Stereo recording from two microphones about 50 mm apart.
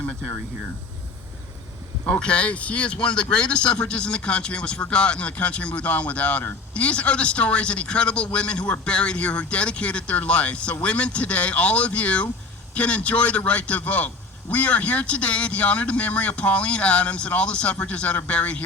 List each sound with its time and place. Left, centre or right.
2.0 s speech: left